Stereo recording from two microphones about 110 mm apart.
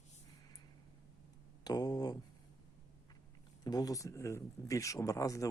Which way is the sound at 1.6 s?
40° left (ahead or behind).